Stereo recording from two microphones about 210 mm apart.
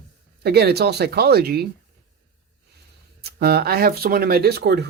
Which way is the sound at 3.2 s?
50° right (ahead or behind).